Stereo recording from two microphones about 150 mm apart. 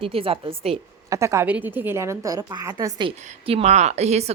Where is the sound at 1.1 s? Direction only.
20° right (ahead or behind).